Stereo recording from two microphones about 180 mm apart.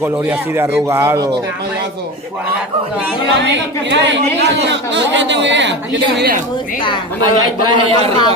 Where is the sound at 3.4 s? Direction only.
80° right.